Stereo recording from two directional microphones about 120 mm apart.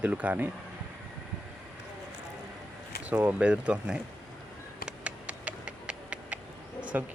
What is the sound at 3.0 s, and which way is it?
Speech, 15° right (ahead or behind).